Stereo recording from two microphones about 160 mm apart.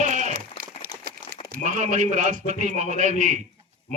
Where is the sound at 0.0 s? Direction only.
50° right (ahead or behind).